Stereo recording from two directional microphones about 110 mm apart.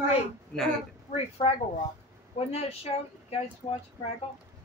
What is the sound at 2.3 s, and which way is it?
Speech, 65° left (ahead or behind).